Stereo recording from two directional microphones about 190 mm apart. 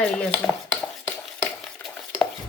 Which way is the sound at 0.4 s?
20° left (ahead or behind).